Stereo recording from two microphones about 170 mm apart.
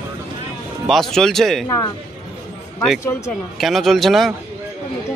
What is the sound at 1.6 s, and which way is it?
Speech, 25° left (ahead or behind).